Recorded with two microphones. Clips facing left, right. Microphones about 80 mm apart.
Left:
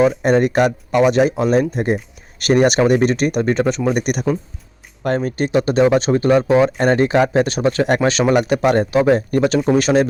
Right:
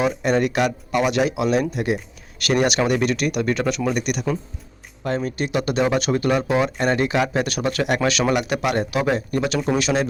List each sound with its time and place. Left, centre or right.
0.2 s speech: left
3.9 s speech: left